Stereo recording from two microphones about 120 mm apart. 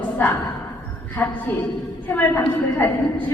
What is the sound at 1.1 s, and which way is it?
A woman's voice, 15° left (ahead or behind).